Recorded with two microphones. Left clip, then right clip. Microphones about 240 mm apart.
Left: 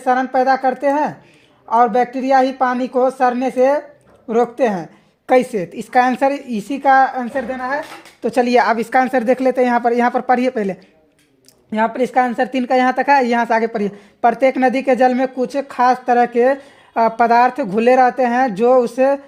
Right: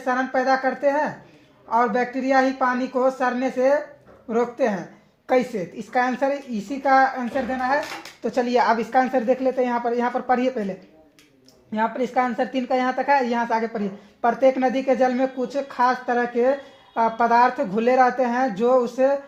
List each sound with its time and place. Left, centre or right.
0.0 s speech: left
11.7 s speech: left